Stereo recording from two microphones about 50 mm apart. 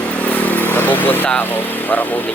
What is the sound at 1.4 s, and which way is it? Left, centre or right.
Speech, left.